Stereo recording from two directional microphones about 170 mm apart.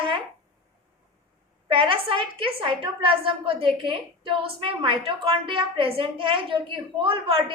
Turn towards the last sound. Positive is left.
turn(degrees=-30)  # may be behind; listen again after turning